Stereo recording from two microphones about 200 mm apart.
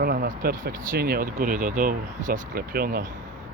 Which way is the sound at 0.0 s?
50° right (ahead or behind).